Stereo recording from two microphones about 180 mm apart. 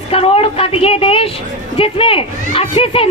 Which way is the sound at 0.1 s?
30° left (ahead or behind).